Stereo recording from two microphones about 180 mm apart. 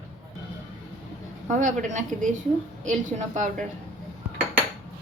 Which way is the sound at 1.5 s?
45° right (ahead or behind).